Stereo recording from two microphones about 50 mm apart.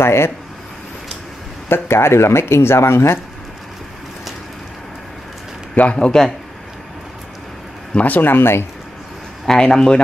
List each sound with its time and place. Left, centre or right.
0.0 s speech: left
1.7 s speech: left
5.9 s speech: centre
7.9 s speech: left
8.3 s speech: left
9.5 s speech: centre